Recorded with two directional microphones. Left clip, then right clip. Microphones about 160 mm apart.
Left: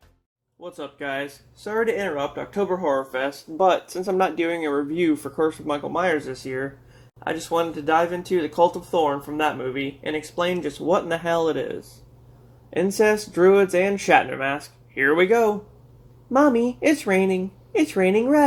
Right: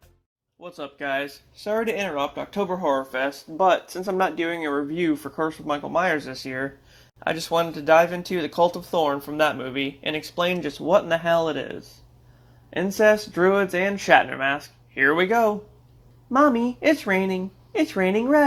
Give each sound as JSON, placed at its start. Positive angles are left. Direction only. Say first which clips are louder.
{"t": 0.6, "sound": "speech", "louder": "even", "side_deg": -25}
{"t": 2.8, "sound": "speech", "louder": "even", "side_deg": -35}
{"t": 3.6, "sound": "speech", "louder": "even", "side_deg": -10}
{"t": 7.4, "sound": "speech", "louder": "right 2 dB", "side_deg": -40}
{"t": 9.4, "sound": "speech", "louder": "right 2 dB", "side_deg": -45}